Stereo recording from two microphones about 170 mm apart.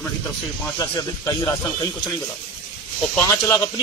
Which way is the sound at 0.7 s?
20° left (ahead or behind).